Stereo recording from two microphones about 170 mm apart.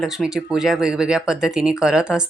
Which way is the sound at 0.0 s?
5° right (ahead or behind).